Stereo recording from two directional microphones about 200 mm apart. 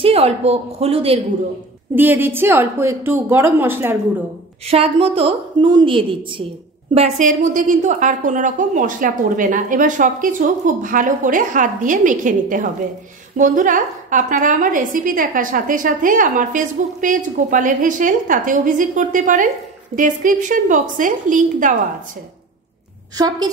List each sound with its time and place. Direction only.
0.0 s a woman's voice: 30° right (ahead or behind)
2.0 s a woman's voice: 10° right (ahead or behind)
4.6 s a woman's voice: 30° right (ahead or behind)
6.9 s a woman's voice: 35° right (ahead or behind)
23.1 s a woman's voice: 20° right (ahead or behind)